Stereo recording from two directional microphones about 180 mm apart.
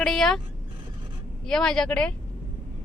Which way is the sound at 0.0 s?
5° left (ahead or behind).